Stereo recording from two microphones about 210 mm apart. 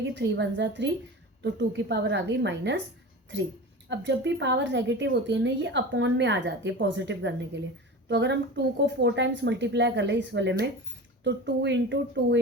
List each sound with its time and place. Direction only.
0.0 s a woman's voice: 55° right (ahead or behind)
3.8 s a woman's voice: 60° right (ahead or behind)